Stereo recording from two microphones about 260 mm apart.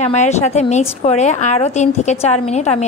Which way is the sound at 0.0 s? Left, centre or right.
Left.